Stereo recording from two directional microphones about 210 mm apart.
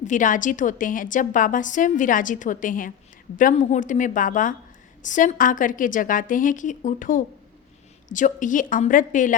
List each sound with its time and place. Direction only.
0.0 s a woman's voice: 35° left (ahead or behind)